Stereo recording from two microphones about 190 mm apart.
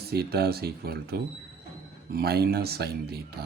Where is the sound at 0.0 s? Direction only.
55° right (ahead or behind).